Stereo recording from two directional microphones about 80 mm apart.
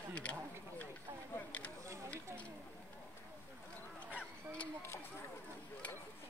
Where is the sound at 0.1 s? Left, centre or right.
Centre.